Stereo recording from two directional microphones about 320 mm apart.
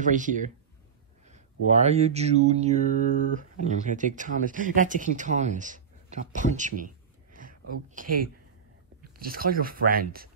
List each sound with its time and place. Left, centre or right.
0.0 s speech: right
2.9 s speech: left
3.3 s speech: right